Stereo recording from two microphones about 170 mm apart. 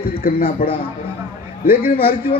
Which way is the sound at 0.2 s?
60° left (ahead or behind).